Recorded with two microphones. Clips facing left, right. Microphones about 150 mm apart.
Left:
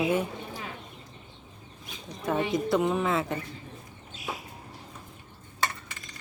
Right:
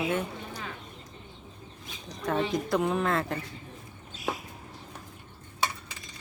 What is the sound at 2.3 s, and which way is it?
Speech, 5° left (ahead or behind).